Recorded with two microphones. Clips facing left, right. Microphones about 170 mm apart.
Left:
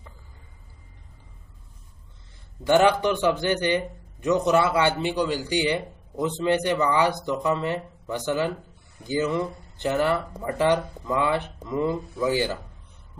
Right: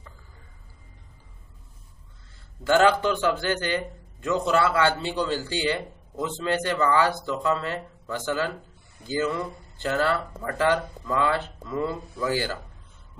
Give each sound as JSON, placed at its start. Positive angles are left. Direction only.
{"t": 2.6, "sound": "a man's voice", "side_deg": 15}